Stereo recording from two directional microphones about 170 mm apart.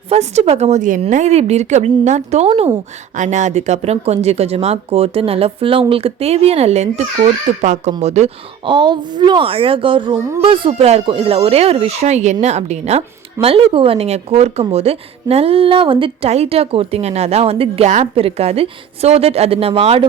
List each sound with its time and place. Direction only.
0.1 s speech: 40° right (ahead or behind)